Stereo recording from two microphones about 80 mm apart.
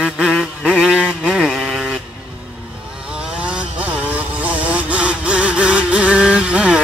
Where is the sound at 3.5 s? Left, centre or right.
Centre.